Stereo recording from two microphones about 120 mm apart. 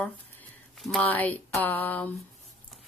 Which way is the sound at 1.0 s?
15° left (ahead or behind).